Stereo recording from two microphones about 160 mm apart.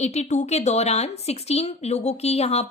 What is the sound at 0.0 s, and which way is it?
A woman's voice, 45° left (ahead or behind).